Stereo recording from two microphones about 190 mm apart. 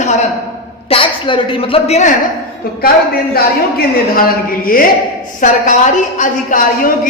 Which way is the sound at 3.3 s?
50° left (ahead or behind).